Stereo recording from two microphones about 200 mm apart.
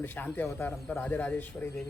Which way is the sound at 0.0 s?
10° left (ahead or behind).